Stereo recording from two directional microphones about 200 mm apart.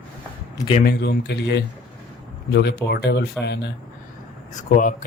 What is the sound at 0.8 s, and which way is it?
Speech, 55° left (ahead or behind).